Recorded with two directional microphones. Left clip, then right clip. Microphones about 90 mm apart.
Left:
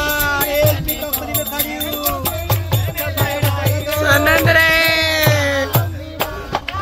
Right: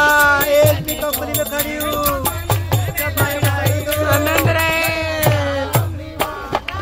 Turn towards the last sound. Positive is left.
turn(degrees=-20)  # may be behind; listen again after turning